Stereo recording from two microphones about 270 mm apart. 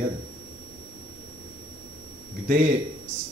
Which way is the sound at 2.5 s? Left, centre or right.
Right.